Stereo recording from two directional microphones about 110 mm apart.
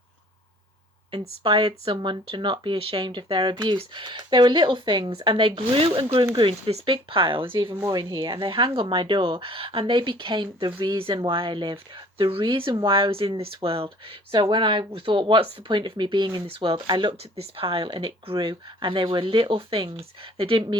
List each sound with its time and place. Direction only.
1.5 s speech: 40° right (ahead or behind)
7.9 s speech: 40° right (ahead or behind)
17.3 s speech: 60° right (ahead or behind)